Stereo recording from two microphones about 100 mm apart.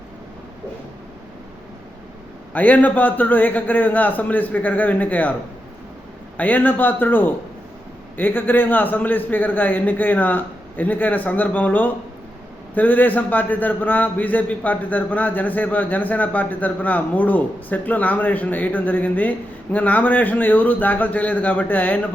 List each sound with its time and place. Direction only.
2.5 s a man's voice: 15° left (ahead or behind)
6.3 s a man's voice: 15° left (ahead or behind)